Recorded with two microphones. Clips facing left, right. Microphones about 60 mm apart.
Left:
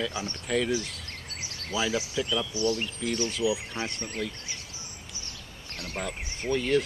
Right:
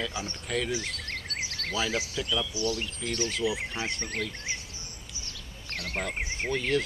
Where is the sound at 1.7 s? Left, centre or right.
Centre.